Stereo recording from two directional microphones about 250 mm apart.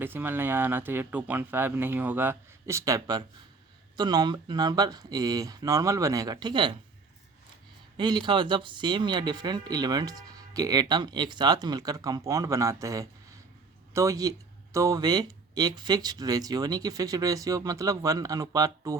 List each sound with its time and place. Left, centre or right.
0.0 s speech: centre
7.9 s speech: centre